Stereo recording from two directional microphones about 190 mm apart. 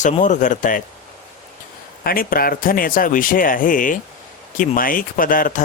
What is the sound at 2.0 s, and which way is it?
Speech, 50° left (ahead or behind).